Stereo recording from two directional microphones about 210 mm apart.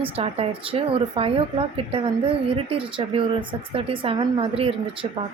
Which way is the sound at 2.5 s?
25° right (ahead or behind).